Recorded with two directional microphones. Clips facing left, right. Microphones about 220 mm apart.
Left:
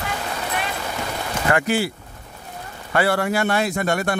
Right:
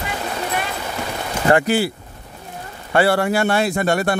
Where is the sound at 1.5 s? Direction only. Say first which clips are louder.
Right 4 dB; 35° right (ahead or behind).